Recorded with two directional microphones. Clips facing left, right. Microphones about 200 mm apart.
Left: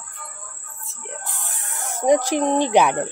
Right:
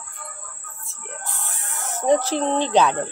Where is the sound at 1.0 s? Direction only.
15° left (ahead or behind).